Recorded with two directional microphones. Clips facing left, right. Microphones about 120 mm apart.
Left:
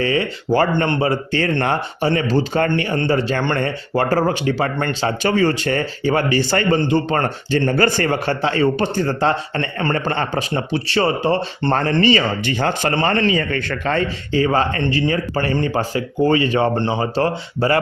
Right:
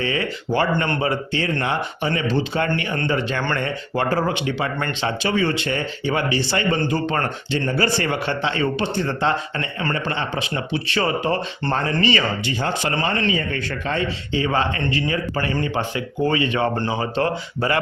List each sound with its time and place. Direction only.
0.0 s speech: 35° left (ahead or behind)
0.9 s a man's voice: 30° left (ahead or behind)
1.6 s speech: 40° left (ahead or behind)
6.7 s speech: 30° left (ahead or behind)
7.7 s speech: 50° left (ahead or behind)
10.5 s speech: 30° left (ahead or behind)
12.5 s a man's voice: 60° left (ahead or behind)
14.3 s speech: 40° left (ahead or behind)